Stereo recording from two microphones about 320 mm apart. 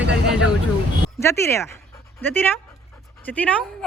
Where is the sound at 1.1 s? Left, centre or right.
Centre.